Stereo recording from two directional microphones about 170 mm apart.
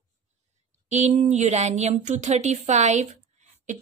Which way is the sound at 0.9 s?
45° right (ahead or behind).